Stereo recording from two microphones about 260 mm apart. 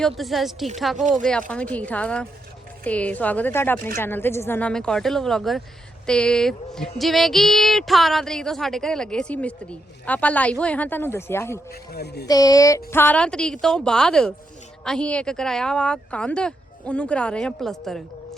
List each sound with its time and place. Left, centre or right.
0.2 s speech: centre
0.9 s speech: right
1.3 s speech: centre
11.7 s speech: left
12.3 s speech: centre